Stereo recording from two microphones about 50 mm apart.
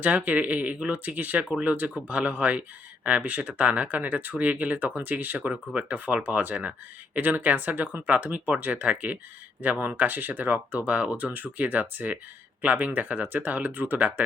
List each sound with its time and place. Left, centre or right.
0.0 s speech: right